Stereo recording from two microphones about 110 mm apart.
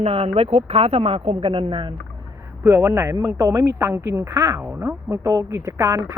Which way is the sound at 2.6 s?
20° right (ahead or behind).